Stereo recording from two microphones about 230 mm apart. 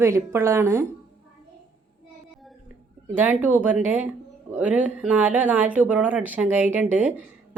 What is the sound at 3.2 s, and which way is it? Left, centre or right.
Speech, centre.